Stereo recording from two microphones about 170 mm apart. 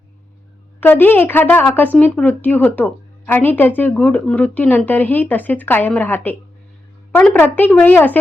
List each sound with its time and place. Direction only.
0.8 s a woman's voice: 10° left (ahead or behind)